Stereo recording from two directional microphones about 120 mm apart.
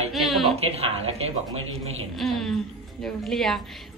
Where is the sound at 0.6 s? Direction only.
55° right (ahead or behind).